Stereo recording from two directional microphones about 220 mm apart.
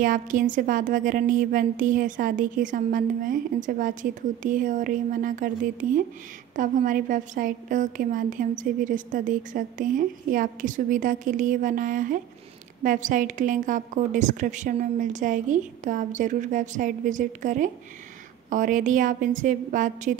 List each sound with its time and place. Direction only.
0.0 s a woman's voice: 40° right (ahead or behind)